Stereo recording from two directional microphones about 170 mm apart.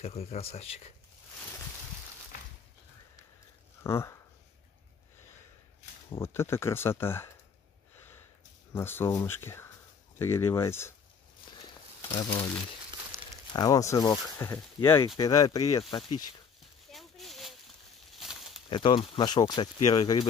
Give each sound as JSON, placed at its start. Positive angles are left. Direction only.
{"t": 0.0, "sound": "speech", "side_deg": 35}
{"t": 3.8, "sound": "speech", "side_deg": 15}
{"t": 6.1, "sound": "speech", "side_deg": 15}
{"t": 8.7, "sound": "speech", "side_deg": 15}
{"t": 12.1, "sound": "speech", "side_deg": 20}
{"t": 13.1, "sound": "a sound", "side_deg": -15}
{"t": 13.5, "sound": "speech", "side_deg": 20}
{"t": 16.9, "sound": "a sound", "side_deg": 0}
{"t": 18.7, "sound": "speech", "side_deg": 30}